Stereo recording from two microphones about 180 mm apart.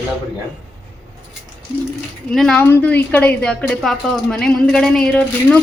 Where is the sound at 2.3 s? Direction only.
5° left (ahead or behind).